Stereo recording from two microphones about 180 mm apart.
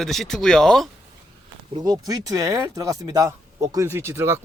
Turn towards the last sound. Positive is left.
turn(degrees=-15)  # may be behind; listen again after turning